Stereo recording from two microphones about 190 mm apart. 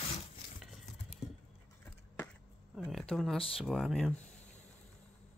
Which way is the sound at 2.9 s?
Centre (ahead or behind).